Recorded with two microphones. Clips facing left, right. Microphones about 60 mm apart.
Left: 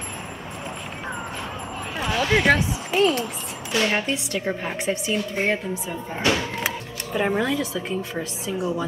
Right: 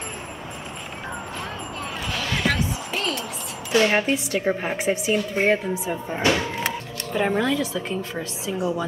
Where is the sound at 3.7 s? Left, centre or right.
Centre.